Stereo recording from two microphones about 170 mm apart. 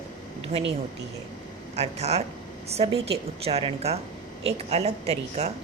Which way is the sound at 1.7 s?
40° right (ahead or behind).